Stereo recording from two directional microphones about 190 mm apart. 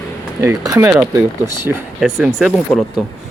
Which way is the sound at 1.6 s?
Centre (ahead or behind).